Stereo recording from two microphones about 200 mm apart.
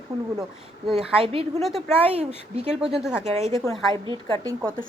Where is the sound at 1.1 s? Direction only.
30° right (ahead or behind).